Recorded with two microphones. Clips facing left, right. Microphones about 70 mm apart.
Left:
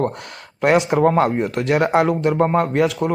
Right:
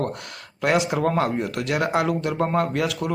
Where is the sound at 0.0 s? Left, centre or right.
Left.